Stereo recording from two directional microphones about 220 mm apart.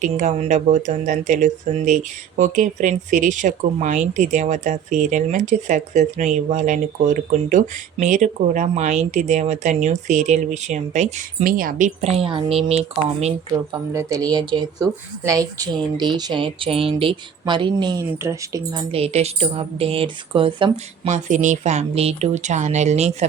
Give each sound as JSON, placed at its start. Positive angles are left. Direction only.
{"t": 0.0, "sound": "speech", "side_deg": -35}
{"t": 13.9, "sound": "speech", "side_deg": -15}